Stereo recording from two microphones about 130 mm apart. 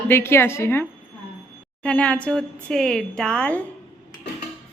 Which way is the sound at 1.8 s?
10° left (ahead or behind).